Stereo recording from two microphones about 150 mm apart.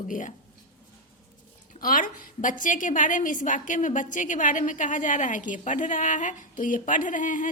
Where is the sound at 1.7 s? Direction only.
65° left (ahead or behind).